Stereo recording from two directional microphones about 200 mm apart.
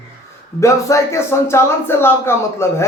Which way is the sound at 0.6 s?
15° left (ahead or behind).